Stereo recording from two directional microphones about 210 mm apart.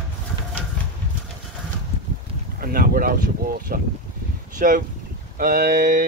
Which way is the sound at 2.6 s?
45° right (ahead or behind).